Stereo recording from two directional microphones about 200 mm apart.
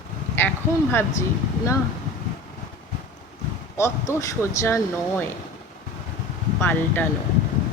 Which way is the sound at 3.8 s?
15° left (ahead or behind).